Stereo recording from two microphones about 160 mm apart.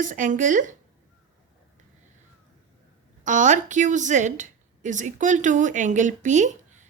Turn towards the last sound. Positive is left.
turn(degrees=-50)  # may be behind; listen again after turning